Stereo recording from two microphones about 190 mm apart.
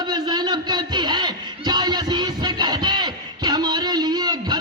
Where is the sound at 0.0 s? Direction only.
20° right (ahead or behind).